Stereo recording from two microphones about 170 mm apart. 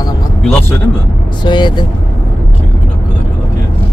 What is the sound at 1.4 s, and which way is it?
Speech, 25° left (ahead or behind).